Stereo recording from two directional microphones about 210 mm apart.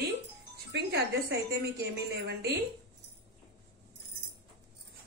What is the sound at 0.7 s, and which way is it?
Speech, 50° right (ahead or behind).